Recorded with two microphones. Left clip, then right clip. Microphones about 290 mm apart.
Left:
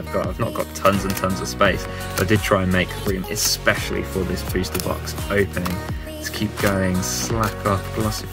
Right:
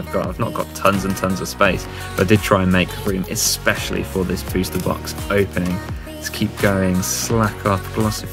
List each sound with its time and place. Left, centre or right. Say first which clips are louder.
0.1 s speech: right 2 dB; centre